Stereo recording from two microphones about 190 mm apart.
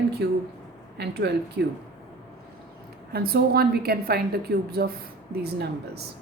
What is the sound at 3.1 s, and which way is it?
A woman's voice, 55° right (ahead or behind).